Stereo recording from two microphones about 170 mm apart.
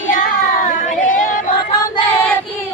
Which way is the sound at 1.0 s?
50° left (ahead or behind).